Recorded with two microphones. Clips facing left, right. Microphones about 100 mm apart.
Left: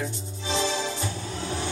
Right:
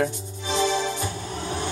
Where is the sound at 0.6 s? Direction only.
55° right (ahead or behind).